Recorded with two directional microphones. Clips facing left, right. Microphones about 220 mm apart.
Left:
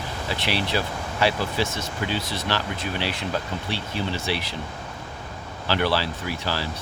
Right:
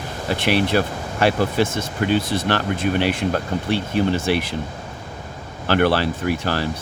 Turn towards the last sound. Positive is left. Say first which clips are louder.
# right 7 dB
turn(degrees=-55)  # may be behind; listen again after turning